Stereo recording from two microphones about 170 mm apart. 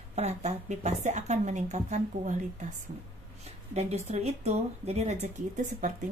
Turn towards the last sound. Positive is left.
turn(degrees=-45)  # may be behind; listen again after turning